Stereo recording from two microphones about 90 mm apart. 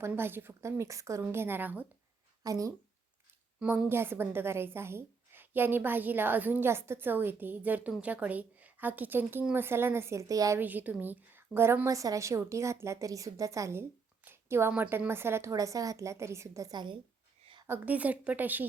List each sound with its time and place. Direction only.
0.2 s a woman's voice: 25° right (ahead or behind)
2.4 s speech: 40° right (ahead or behind)
3.8 s a woman's voice: 25° right (ahead or behind)
10.6 s a woman's voice: 20° right (ahead or behind)
14.3 s a sound: 30° right (ahead or behind)
14.8 s a woman's voice: 25° right (ahead or behind)
16.7 s a woman's voice: 60° right (ahead or behind)
17.7 s a woman's voice: 15° right (ahead or behind)